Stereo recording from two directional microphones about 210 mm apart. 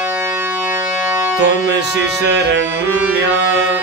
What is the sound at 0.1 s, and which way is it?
Music, 15° right (ahead or behind).